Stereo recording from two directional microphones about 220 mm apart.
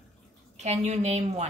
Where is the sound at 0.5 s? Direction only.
30° right (ahead or behind).